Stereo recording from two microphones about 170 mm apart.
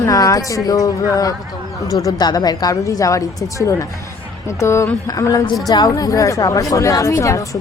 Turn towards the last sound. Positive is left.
turn(degrees=20)  # may be behind; listen again after turning